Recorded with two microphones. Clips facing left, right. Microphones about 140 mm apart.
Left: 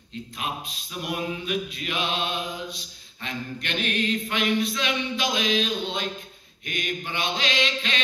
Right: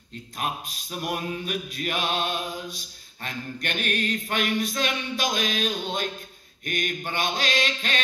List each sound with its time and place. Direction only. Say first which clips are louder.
1.0 s mantra: even; 45° right (ahead or behind)